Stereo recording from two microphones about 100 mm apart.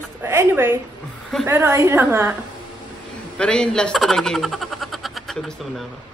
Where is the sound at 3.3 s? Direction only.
10° left (ahead or behind).